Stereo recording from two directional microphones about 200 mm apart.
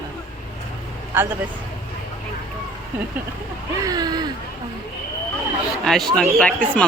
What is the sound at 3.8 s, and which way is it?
Speech, 20° right (ahead or behind).